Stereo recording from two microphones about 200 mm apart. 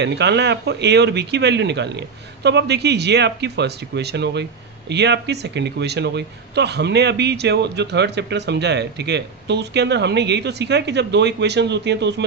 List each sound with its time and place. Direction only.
0.0 s a man's voice: 60° right (ahead or behind)